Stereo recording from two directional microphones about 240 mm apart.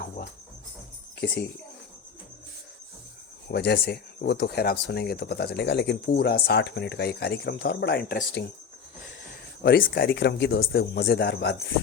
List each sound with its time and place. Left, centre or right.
3.5 s speech: left
9.6 s a man's voice: left